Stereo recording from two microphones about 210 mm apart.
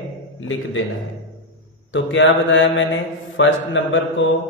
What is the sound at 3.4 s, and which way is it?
Mantra, 70° left (ahead or behind).